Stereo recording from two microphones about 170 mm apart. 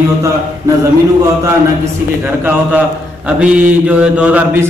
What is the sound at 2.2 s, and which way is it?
Mantra, 10° right (ahead or behind).